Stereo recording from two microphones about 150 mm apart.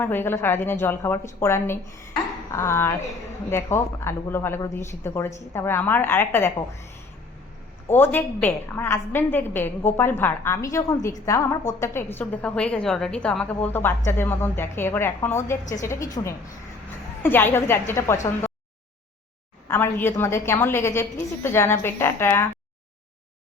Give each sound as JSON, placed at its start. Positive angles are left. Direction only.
{"t": 0.0, "sound": "a woman's voice", "side_deg": 15}
{"t": 7.9, "sound": "a woman's voice", "side_deg": 15}
{"t": 19.6, "sound": "a woman's voice", "side_deg": 15}